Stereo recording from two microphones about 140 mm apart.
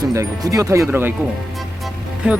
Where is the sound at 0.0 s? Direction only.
25° right (ahead or behind).